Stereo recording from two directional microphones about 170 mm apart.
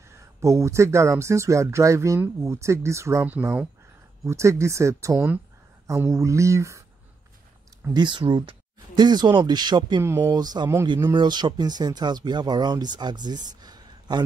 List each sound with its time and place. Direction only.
0.1 s speech: 15° right (ahead or behind)
7.9 s speech: 25° right (ahead or behind)
10.0 s speech: 15° right (ahead or behind)